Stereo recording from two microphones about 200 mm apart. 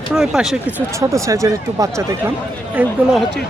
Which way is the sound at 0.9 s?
15° right (ahead or behind).